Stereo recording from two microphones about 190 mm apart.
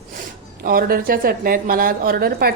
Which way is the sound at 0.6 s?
50° right (ahead or behind).